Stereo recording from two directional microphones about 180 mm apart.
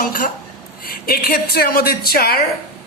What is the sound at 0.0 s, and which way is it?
A woman's voice, 50° left (ahead or behind).